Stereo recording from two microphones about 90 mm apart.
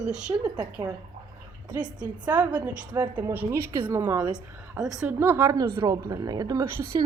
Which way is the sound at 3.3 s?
30° right (ahead or behind).